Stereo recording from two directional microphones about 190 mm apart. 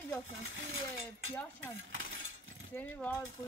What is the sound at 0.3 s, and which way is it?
Speech, 90° right.